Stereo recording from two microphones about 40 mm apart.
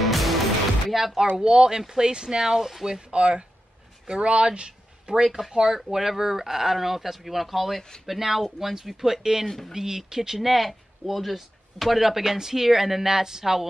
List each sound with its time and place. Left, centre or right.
0.0 s music: centre
0.9 s speech: centre
1.3 s speech: right
3.1 s speech: right; by 13.7 s centre